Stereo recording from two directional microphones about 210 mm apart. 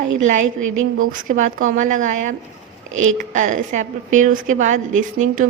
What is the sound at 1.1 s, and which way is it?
A woman's voice, 40° right (ahead or behind).